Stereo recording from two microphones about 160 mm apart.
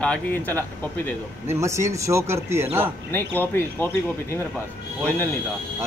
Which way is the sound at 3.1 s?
15° left (ahead or behind).